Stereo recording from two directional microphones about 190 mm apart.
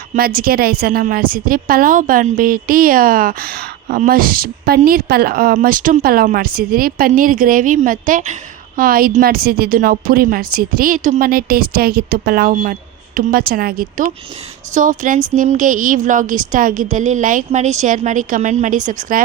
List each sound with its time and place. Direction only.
0.1 s a woman's voice: 50° right (ahead or behind)